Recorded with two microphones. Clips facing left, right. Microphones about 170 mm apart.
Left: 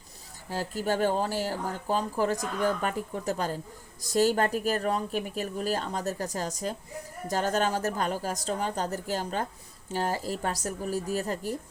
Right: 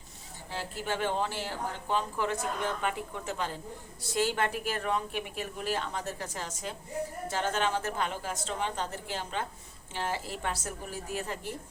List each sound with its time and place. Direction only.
0.5 s speech: 40° left (ahead or behind)